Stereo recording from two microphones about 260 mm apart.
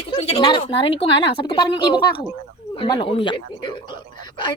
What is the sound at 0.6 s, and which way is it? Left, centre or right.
A man's voice, left.